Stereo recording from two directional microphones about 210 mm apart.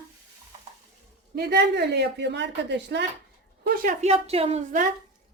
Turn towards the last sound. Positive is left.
turn(degrees=-35)  # may be behind; listen again after turning